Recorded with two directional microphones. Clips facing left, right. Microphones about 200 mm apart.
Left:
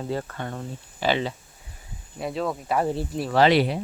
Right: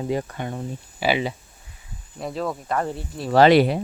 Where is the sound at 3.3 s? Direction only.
50° right (ahead or behind).